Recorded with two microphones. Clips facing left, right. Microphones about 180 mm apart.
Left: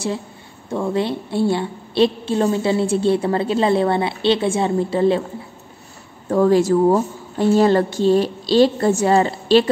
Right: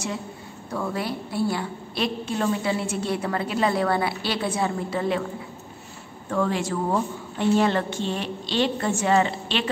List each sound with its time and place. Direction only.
0.7 s a woman's voice: 25° left (ahead or behind)
6.3 s a woman's voice: 40° left (ahead or behind)